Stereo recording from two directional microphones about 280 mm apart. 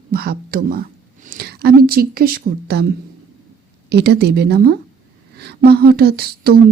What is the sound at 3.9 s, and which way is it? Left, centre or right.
A woman's voice, right.